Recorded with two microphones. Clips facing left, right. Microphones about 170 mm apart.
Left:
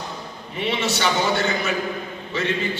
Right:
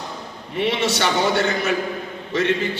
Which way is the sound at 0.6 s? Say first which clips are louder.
Right 2 dB; 65° right (ahead or behind).